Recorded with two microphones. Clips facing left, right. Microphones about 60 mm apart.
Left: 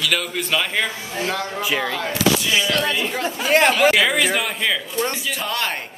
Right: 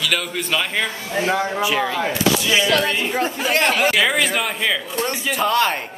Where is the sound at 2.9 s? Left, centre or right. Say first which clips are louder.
Right 2 dB; right.